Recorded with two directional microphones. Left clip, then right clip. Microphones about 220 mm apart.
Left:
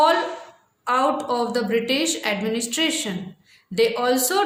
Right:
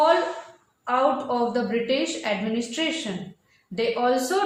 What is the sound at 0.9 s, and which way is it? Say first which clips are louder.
A woman's voice: left 2 dB; 50° left (ahead or behind).